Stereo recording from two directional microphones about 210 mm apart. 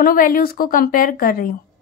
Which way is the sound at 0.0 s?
45° left (ahead or behind).